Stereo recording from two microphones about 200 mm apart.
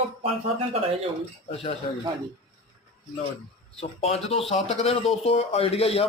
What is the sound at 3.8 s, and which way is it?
A man's voice, 30° left (ahead or behind).